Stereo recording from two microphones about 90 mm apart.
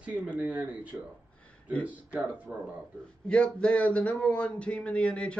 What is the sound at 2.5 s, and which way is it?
Speech, 20° right (ahead or behind).